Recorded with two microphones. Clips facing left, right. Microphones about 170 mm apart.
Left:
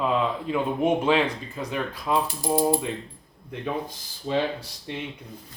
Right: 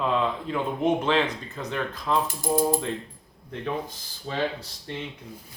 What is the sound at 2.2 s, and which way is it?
Mechanisms, 45° right (ahead or behind).